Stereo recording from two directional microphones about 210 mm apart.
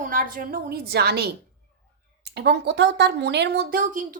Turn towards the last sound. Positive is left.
turn(degrees=-40)  # may be behind; listen again after turning